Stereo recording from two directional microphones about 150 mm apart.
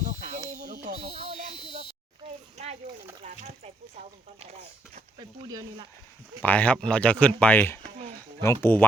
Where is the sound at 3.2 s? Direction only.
50° right (ahead or behind).